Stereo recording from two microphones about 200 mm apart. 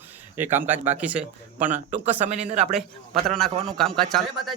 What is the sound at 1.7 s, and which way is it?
Speech, 35° right (ahead or behind).